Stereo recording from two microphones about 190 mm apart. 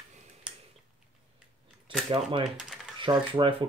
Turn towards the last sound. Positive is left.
turn(degrees=-25)  # may be behind; listen again after turning